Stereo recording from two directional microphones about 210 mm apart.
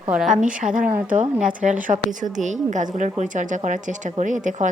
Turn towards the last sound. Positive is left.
turn(degrees=-35)  # may be behind; listen again after turning